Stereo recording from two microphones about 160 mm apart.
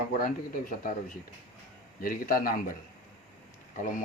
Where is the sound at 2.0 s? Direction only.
65° left (ahead or behind).